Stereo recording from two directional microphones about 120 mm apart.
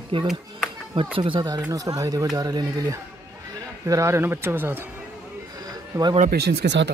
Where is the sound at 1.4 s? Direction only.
30° right (ahead or behind).